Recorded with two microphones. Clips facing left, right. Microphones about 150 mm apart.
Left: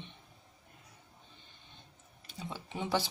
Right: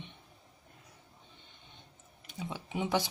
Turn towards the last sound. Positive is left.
turn(degrees=-15)  # may be behind; listen again after turning